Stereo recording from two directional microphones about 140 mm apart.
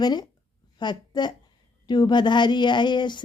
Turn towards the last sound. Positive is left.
turn(degrees=35)  # may be behind; listen again after turning